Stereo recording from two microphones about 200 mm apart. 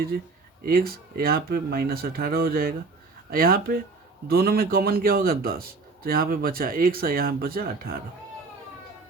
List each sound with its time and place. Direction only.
0.6 s a man's voice: 50° right (ahead or behind)